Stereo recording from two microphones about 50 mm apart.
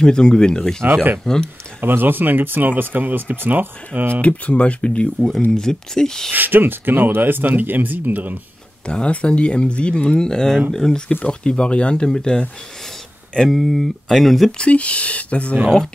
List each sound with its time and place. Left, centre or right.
0.0 s speech: centre
1.8 s speech: right
4.2 s speech: left
5.5 s speech: centre
6.3 s speech: right
8.8 s speech: centre
13.5 s speech: centre
14.6 s speech: left